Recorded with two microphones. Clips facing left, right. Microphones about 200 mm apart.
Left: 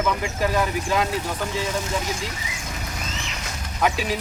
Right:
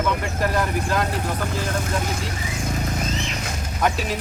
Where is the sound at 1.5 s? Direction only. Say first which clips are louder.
Even; 55° right (ahead or behind).